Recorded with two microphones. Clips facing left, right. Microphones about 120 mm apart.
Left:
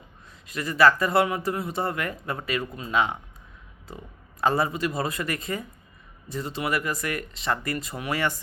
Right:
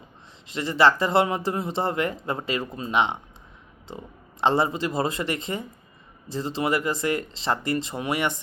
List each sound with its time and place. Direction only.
0.4 s speech: 25° right (ahead or behind)